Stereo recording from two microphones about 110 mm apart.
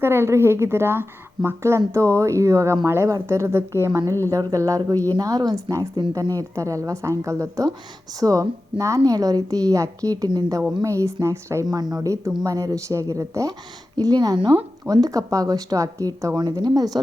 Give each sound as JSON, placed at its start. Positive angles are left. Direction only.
{"t": 0.0, "sound": "a woman's voice", "side_deg": -20}
{"t": 11.6, "sound": "a woman's voice", "side_deg": -35}